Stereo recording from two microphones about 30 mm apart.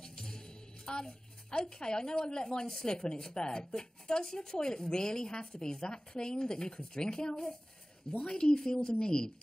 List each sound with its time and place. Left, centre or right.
0.0 s music: left
0.8 s a woman's voice: left